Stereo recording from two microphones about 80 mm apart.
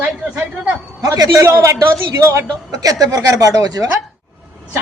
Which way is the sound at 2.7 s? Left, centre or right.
Right.